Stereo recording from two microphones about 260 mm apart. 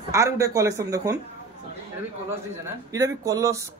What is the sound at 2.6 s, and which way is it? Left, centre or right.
A man's voice, centre.